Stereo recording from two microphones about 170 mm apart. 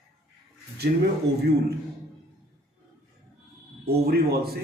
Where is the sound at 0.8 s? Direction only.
70° right (ahead or behind).